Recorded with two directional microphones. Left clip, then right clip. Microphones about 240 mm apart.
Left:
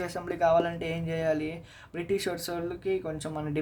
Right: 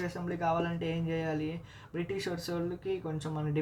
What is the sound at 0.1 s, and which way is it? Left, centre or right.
Speech, left.